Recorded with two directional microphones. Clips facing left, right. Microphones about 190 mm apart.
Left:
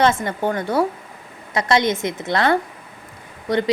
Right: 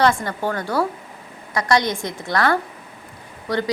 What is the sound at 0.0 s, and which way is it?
A woman's voice, 20° left (ahead or behind).